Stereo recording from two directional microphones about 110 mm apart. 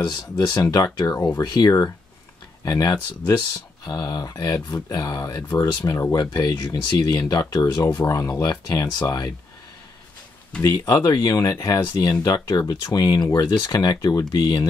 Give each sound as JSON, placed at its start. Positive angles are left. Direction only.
{"t": 0.0, "sound": "speech", "side_deg": 40}
{"t": 6.3, "sound": "speech", "side_deg": 40}
{"t": 10.6, "sound": "speech", "side_deg": 35}